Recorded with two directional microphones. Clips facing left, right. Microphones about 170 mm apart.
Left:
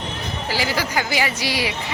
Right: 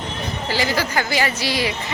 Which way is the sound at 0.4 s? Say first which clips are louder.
Right 2 dB; 10° left (ahead or behind).